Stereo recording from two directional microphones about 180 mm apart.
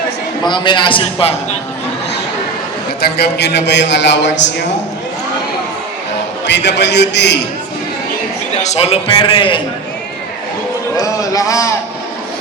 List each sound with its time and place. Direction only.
0.4 s a man's voice: 25° left (ahead or behind)
3.0 s a man's voice: 65° left (ahead or behind)
6.4 s a man's voice: 75° left (ahead or behind)
8.6 s a man's voice: 35° left (ahead or behind)
10.9 s a man's voice: 20° left (ahead or behind)